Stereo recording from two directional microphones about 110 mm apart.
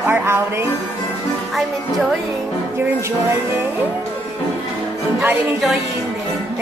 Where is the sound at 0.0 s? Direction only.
20° right (ahead or behind).